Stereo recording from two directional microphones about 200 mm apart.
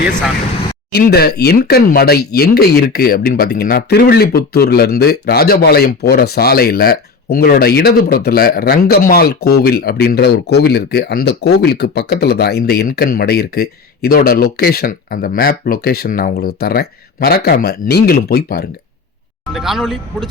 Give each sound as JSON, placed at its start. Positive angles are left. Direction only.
{"t": 0.9, "sound": "speech", "side_deg": 50}
{"t": 19.5, "sound": "speech", "side_deg": 0}